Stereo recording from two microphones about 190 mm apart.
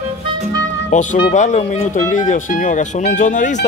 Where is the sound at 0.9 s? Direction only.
40° left (ahead or behind).